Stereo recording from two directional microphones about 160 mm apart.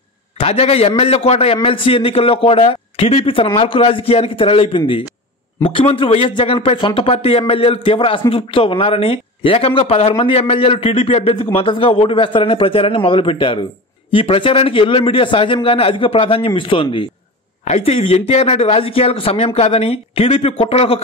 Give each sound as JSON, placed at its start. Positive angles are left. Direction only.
{"t": 0.4, "sound": "speech", "side_deg": 40}